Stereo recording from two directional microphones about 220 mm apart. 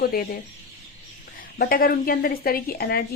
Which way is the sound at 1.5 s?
40° left (ahead or behind).